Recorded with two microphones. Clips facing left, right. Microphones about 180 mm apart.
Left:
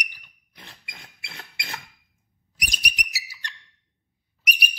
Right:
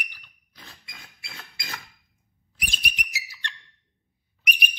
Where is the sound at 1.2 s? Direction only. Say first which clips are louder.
Left 2 dB; 25° left (ahead or behind).